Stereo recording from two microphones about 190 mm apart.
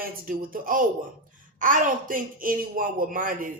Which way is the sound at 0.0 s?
50° right (ahead or behind).